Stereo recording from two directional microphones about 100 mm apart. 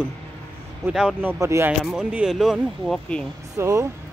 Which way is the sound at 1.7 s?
5° right (ahead or behind).